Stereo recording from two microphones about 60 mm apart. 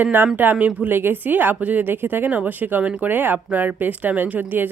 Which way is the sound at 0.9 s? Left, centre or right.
Right.